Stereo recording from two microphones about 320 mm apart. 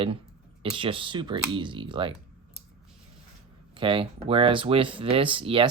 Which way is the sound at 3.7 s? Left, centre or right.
Centre.